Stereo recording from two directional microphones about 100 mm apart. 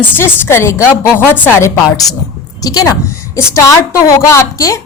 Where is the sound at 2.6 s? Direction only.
40° left (ahead or behind).